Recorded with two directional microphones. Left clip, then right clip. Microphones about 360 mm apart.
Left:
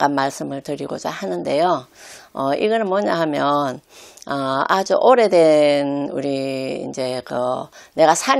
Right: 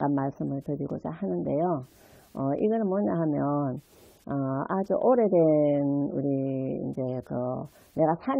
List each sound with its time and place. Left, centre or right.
0.0 s speech: centre; by 6.8 s left
6.9 s speech: centre